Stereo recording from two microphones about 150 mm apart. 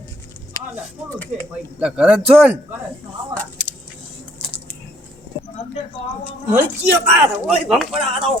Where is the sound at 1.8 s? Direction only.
5° right (ahead or behind).